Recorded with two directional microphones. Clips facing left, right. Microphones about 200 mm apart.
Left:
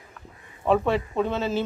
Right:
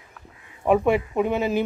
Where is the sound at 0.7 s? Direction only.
15° right (ahead or behind).